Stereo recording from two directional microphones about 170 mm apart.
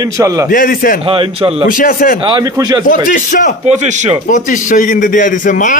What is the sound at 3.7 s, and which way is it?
Speech, 45° right (ahead or behind).